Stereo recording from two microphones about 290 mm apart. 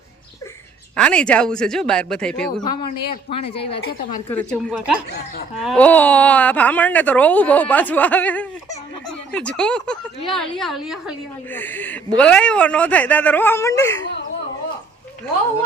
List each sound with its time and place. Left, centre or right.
0.9 s speech: centre
3.2 s speech: centre
4.3 s speech: centre